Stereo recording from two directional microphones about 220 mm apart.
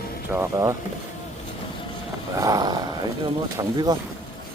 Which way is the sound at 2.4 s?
20° right (ahead or behind).